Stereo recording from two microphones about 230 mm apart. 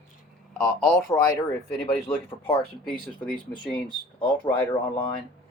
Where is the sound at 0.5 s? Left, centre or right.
Centre.